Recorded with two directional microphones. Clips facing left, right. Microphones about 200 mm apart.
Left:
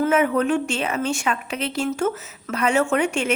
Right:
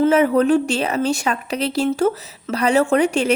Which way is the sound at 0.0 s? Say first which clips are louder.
Right 4 dB; 30° right (ahead or behind).